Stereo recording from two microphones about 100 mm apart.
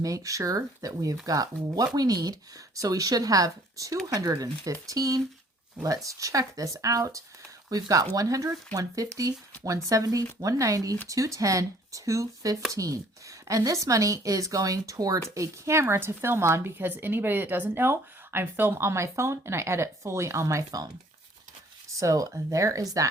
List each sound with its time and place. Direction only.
0.0 s speech: 35° right (ahead or behind)
21.9 s speech: 35° right (ahead or behind)